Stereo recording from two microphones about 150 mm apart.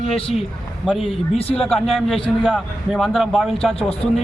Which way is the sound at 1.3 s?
40° left (ahead or behind).